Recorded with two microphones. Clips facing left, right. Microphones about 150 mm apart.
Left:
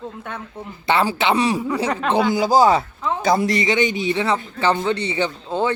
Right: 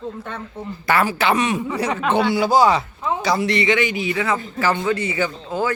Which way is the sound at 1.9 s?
5° right (ahead or behind).